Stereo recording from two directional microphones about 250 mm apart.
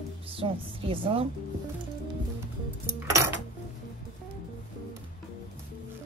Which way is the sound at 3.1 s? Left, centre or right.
Centre.